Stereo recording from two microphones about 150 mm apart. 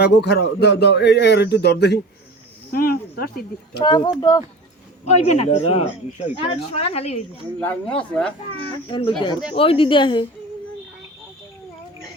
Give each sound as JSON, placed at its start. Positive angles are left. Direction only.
{"t": 0.0, "sound": "speech", "side_deg": 90}
{"t": 3.8, "sound": "speech", "side_deg": 30}
{"t": 5.0, "sound": "speech", "side_deg": 50}
{"t": 7.6, "sound": "speech", "side_deg": 10}
{"t": 8.9, "sound": "a woman's voice", "side_deg": 35}